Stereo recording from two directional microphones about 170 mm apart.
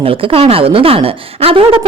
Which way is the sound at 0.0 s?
35° right (ahead or behind).